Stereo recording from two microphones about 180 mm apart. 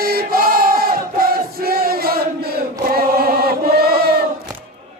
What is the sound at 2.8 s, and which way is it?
Chant, 55° right (ahead or behind).